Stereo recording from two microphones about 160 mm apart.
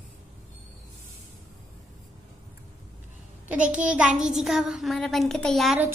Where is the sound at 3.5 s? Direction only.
10° right (ahead or behind).